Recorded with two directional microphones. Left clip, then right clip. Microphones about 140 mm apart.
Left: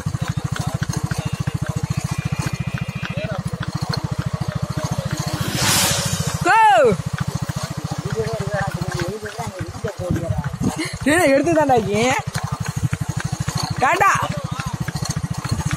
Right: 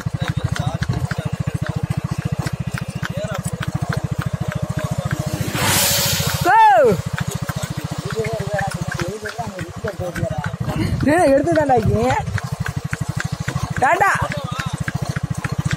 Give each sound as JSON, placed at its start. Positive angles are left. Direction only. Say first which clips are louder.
{"t": 6.4, "sound": "a sound", "louder": "right 1 dB", "side_deg": -30}
{"t": 11.1, "sound": "speech", "louder": "right 1 dB", "side_deg": -15}
{"t": 11.3, "sound": "speech", "louder": "even", "side_deg": -5}
{"t": 13.7, "sound": "speech", "louder": "even", "side_deg": -25}